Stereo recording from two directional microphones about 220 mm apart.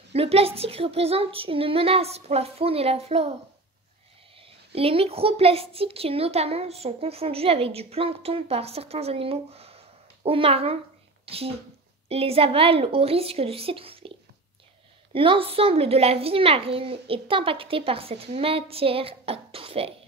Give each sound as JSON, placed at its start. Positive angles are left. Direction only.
{"t": 0.1, "sound": "a child's voice", "side_deg": -25}
{"t": 4.4, "sound": "a child's voice", "side_deg": -25}
{"t": 15.1, "sound": "a child's voice", "side_deg": -25}